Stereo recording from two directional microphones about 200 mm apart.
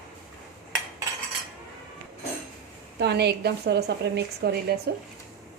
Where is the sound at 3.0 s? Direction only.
55° right (ahead or behind).